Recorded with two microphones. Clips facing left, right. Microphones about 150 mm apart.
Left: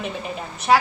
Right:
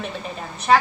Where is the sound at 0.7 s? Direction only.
10° left (ahead or behind).